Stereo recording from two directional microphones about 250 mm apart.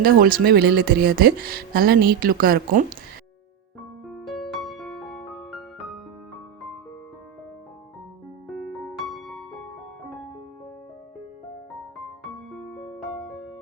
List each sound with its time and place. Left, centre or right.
0.0 s speech: right
4.0 s music: centre
8.4 s music: centre
12.2 s music: centre